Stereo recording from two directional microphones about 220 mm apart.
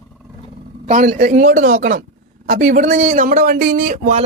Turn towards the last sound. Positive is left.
turn(degrees=-30)  # may be behind; listen again after turning